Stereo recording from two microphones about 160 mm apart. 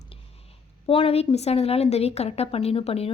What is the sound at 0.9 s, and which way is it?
A woman's voice, 35° left (ahead or behind).